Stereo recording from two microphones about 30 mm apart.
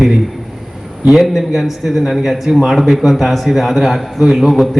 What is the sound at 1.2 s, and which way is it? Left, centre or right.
A man's voice, centre.